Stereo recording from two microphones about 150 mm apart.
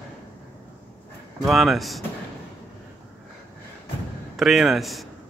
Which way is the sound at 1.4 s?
Centre (ahead or behind).